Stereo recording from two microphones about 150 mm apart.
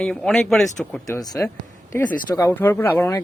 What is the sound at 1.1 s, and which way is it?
Speech, 20° left (ahead or behind).